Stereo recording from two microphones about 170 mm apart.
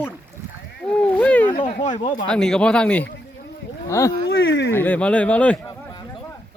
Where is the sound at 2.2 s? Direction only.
5° left (ahead or behind).